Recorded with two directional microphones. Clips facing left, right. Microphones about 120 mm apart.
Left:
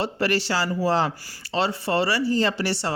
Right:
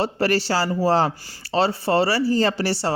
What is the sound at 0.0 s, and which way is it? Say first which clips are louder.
Speech: right 3 dB; 35° right (ahead or behind).